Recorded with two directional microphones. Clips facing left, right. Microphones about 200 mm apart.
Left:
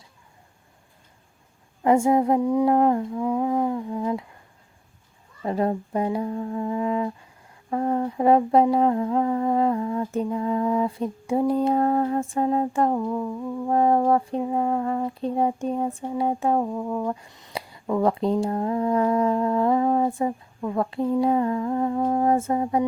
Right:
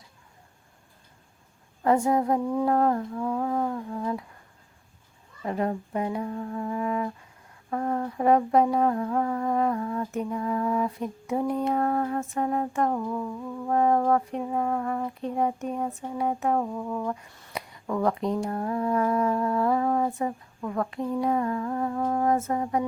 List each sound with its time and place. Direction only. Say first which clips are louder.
1.8 s humming: left 4 dB; 15° left (ahead or behind)
5.4 s speech: left 4 dB; 30° left (ahead or behind)